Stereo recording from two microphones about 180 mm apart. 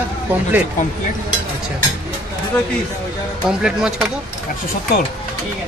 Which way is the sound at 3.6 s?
5° right (ahead or behind).